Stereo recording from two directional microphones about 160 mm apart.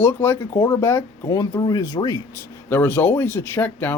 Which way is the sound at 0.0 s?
15° left (ahead or behind).